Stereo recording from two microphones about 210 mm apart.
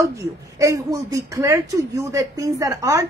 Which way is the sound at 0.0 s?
15° right (ahead or behind).